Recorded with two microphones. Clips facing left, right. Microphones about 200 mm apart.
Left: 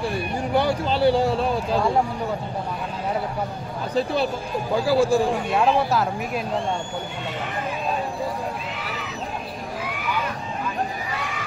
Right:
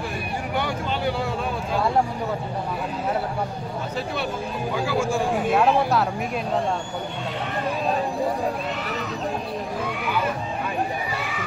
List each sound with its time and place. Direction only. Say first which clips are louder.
0.6 s a sound: left 7 dB; 35° left (ahead or behind)
3.9 s speech: left 7 dB; 30° left (ahead or behind)
5.3 s speech: right 1 dB; centre (ahead or behind)